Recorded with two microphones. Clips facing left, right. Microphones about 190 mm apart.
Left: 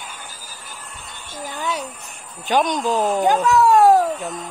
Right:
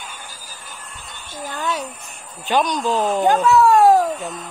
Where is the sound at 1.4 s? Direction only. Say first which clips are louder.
Right 1 dB; 10° left (ahead or behind).